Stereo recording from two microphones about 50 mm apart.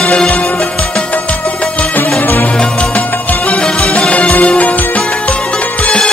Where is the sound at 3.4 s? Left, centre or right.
Centre.